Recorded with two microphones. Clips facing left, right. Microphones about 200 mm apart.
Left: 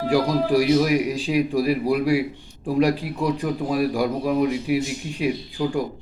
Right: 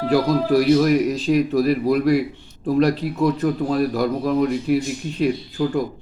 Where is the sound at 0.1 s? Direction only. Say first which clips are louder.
Right 2 dB; 10° left (ahead or behind).